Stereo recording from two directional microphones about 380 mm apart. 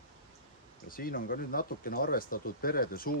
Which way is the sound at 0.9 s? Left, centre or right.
Left.